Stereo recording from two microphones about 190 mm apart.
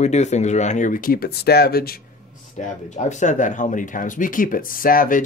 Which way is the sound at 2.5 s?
40° left (ahead or behind).